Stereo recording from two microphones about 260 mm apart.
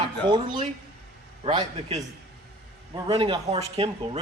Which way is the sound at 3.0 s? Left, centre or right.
Centre.